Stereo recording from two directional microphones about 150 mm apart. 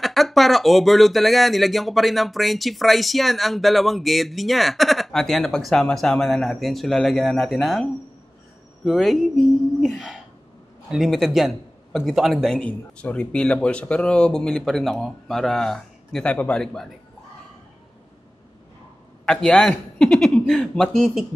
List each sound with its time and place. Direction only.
0.0 s speech: centre (ahead or behind)
19.2 s a man's voice: 5° left (ahead or behind)